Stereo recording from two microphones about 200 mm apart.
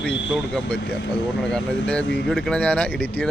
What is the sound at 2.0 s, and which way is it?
Speech, 60° left (ahead or behind).